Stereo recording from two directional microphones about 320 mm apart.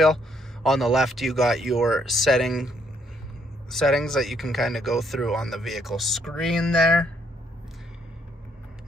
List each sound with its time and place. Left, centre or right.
0.0 s speech: centre
3.7 s speech: centre